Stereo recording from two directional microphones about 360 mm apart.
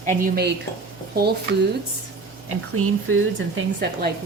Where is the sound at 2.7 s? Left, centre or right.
Right.